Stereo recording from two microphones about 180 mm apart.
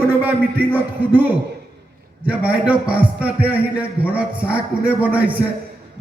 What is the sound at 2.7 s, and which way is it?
A man's voice, 10° right (ahead or behind).